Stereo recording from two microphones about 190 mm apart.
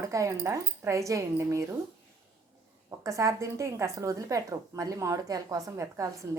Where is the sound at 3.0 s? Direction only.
15° right (ahead or behind).